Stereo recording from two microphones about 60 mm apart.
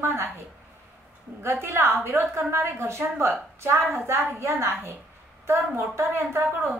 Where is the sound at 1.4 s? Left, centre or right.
Right.